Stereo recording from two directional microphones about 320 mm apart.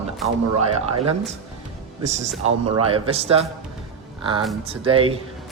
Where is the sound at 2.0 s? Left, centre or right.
Right.